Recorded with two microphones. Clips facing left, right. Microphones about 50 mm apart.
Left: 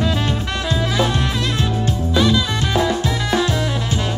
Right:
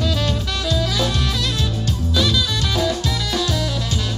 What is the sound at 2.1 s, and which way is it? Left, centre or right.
Music, left.